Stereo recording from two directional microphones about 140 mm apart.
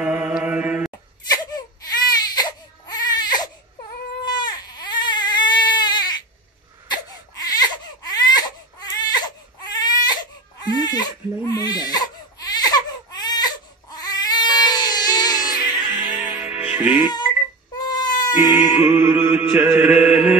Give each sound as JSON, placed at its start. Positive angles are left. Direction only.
{"t": 0.0, "sound": "mantra", "side_deg": -10}
{"t": 1.3, "sound": "baby cry", "side_deg": 30}
{"t": 15.9, "sound": "music", "side_deg": -10}
{"t": 17.7, "sound": "baby cry", "side_deg": 30}
{"t": 18.4, "sound": "a sound", "side_deg": 30}
{"t": 18.8, "sound": "music", "side_deg": -15}